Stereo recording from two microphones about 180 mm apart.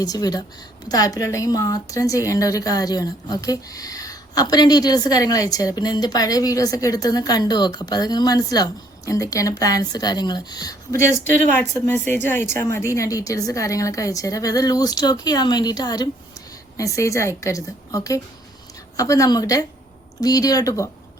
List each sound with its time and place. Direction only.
0.0 s a woman's voice: 20° left (ahead or behind)